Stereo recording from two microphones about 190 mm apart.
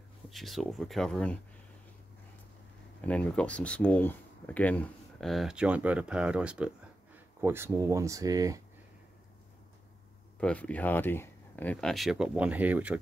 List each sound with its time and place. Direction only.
0.3 s speech: centre (ahead or behind)
3.0 s speech: 5° left (ahead or behind); by 8.6 s 20° right (ahead or behind)
10.4 s speech: 5° left (ahead or behind)